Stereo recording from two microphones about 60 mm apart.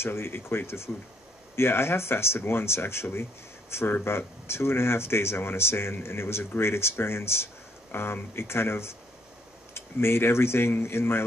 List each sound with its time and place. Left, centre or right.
0.0 s speech: left